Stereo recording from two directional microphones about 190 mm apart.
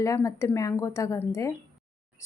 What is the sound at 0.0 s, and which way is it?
Speech, 15° left (ahead or behind).